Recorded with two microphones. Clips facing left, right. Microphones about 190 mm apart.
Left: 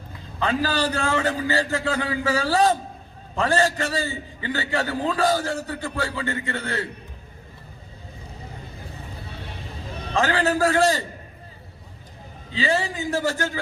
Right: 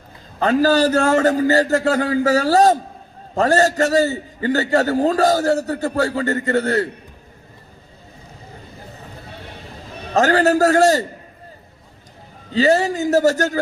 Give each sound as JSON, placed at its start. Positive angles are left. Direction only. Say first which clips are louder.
{"t": 0.3, "sound": "a man's voice", "louder": "right 8 dB", "side_deg": -45}
{"t": 10.2, "sound": "a man's voice", "louder": "right 6 dB", "side_deg": -40}
{"t": 12.5, "sound": "a man's voice", "louder": "right 8 dB", "side_deg": -45}